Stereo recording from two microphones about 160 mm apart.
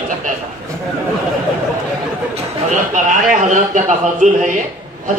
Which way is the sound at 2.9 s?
50° right (ahead or behind).